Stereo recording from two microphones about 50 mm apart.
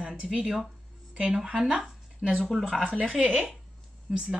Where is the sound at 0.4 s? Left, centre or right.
Centre.